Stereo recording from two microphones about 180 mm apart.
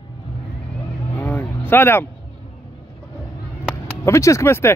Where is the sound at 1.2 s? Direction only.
10° left (ahead or behind).